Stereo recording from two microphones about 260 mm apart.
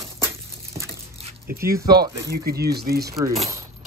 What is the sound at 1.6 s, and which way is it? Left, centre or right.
Speech, centre.